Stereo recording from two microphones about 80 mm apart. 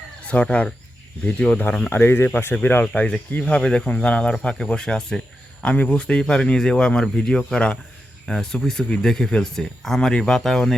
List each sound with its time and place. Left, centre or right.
0.3 s speech: left
1.9 s speech: left; by 10.8 s centre